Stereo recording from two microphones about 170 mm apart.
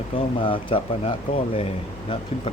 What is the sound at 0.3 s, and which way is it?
Speech, 30° left (ahead or behind).